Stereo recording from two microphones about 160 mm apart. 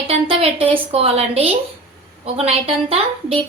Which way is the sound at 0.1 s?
40° right (ahead or behind).